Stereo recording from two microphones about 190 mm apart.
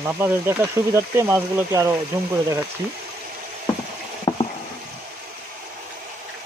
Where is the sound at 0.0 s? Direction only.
10° right (ahead or behind).